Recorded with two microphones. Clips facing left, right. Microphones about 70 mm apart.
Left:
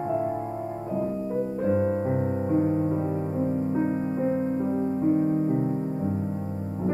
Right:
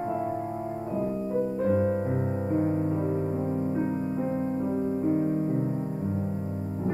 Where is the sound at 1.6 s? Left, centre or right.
Centre.